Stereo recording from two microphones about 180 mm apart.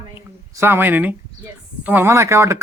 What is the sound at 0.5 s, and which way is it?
A woman's voice, 15° right (ahead or behind).